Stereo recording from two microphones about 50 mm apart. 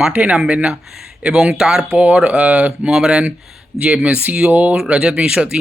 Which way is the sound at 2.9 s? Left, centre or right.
Centre.